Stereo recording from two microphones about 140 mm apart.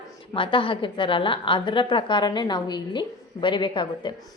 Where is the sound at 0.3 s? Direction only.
40° left (ahead or behind).